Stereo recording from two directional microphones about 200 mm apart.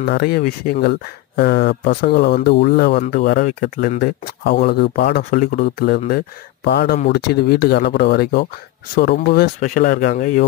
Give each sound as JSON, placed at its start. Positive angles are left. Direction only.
{"t": 0.0, "sound": "speech", "side_deg": 50}